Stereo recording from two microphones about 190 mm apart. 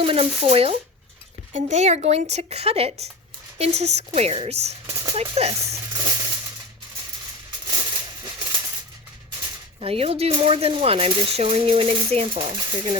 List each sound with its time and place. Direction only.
0.0 s speech: 30° right (ahead or behind)
4.9 s speech: 15° right (ahead or behind)
5.1 s speech: 30° right (ahead or behind)
5.5 s a sound: 15° right (ahead or behind)
7.9 s a sound: 25° right (ahead or behind)
9.8 s speech: 30° right (ahead or behind)